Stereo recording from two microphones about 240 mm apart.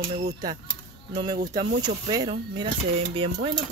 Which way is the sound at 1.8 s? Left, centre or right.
Centre.